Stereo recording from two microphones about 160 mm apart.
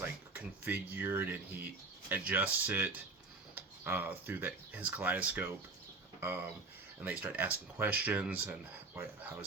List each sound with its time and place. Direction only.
0.0 s speech: 10° right (ahead or behind)